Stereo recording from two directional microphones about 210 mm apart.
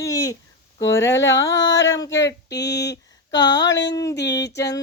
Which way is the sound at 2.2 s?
55° left (ahead or behind).